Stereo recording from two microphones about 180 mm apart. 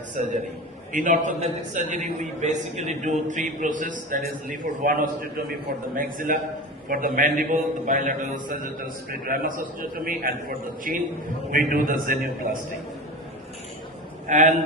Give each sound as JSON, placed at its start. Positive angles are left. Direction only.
{"t": 0.2, "sound": "a man's voice", "side_deg": -40}
{"t": 14.3, "sound": "a man's voice", "side_deg": -45}